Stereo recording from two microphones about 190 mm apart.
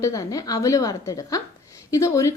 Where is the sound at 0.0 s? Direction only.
15° left (ahead or behind).